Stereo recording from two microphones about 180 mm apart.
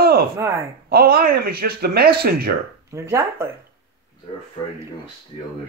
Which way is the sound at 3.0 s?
15° right (ahead or behind).